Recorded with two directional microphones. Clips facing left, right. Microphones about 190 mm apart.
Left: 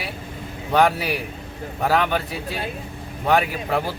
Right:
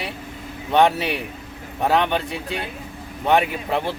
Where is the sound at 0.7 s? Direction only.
20° right (ahead or behind).